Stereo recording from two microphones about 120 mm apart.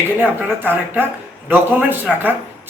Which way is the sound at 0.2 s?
15° right (ahead or behind).